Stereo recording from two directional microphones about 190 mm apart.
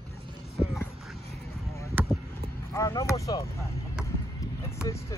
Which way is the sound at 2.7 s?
15° left (ahead or behind).